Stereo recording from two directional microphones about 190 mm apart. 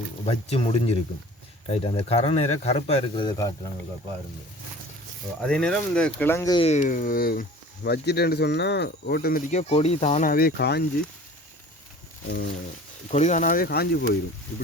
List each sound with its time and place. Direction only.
0.3 s speech: 35° left (ahead or behind)
5.4 s speech: 5° left (ahead or behind)
6.6 s speech: 35° left (ahead or behind); by 9.4 s 55° left (ahead or behind)
9.5 s speech: 35° left (ahead or behind); by 10.8 s 60° left (ahead or behind)
13.1 s speech: 35° left (ahead or behind); by 14.2 s 55° left (ahead or behind)